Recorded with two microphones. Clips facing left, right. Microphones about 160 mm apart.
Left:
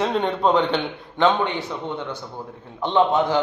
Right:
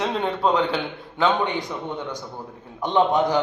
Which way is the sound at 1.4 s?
15° right (ahead or behind).